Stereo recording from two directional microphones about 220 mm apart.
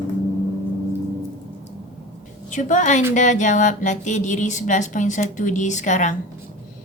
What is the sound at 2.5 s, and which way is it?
Speech, 35° left (ahead or behind).